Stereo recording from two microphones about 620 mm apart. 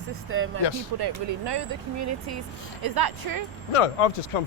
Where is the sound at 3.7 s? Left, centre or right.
Left.